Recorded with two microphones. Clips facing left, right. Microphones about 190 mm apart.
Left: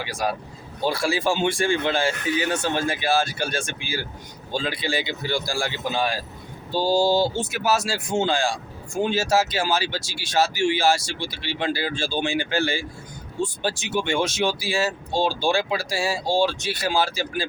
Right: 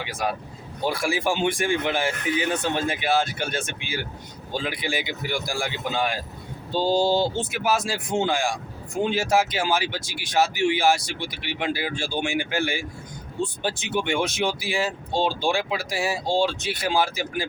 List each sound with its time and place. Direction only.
0.0 s speech: 20° right (ahead or behind)